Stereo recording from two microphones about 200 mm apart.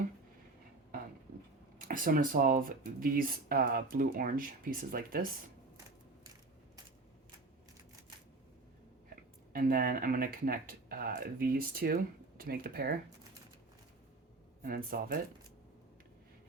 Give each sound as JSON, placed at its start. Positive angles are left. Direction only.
{"t": 1.8, "sound": "speech", "side_deg": -45}
{"t": 9.5, "sound": "speech", "side_deg": -45}
{"t": 14.6, "sound": "speech", "side_deg": -45}